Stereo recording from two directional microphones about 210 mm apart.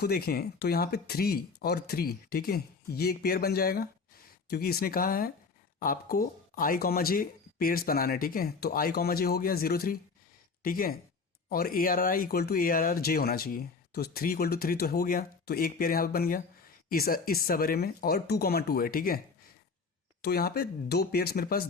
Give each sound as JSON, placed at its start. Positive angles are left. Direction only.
{"t": 0.0, "sound": "speech", "side_deg": 45}
{"t": 20.2, "sound": "speech", "side_deg": 50}